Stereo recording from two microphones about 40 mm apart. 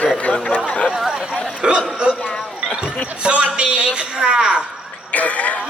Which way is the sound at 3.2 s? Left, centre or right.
Right.